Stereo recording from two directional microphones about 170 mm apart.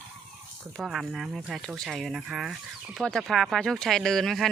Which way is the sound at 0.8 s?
Centre (ahead or behind).